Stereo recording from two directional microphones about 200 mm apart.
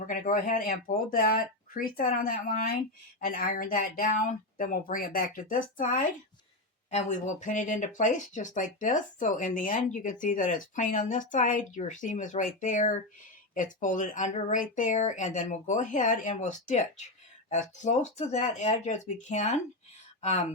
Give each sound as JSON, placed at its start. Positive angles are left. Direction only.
{"t": 0.1, "sound": "speech", "side_deg": 40}